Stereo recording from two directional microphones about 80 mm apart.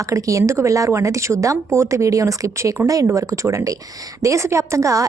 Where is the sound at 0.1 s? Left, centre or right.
Right.